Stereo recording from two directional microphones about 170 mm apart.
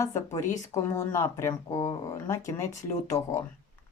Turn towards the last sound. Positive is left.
turn(degrees=15)  # may be behind; listen again after turning